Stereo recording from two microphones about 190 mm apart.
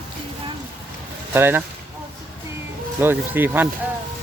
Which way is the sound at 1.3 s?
10° right (ahead or behind).